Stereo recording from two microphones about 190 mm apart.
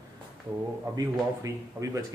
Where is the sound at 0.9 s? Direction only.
20° right (ahead or behind).